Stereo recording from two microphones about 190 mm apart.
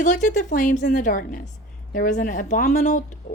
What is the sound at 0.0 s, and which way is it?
A woman's voice, 40° left (ahead or behind).